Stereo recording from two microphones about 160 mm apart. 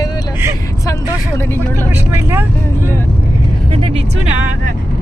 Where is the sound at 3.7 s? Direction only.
35° right (ahead or behind).